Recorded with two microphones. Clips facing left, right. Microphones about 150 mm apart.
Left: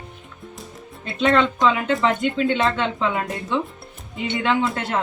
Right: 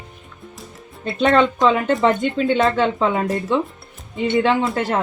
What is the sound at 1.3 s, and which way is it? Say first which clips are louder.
Speech: right 3 dB; 40° right (ahead or behind).